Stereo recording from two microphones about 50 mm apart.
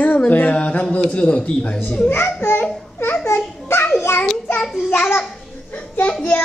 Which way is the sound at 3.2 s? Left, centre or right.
Left.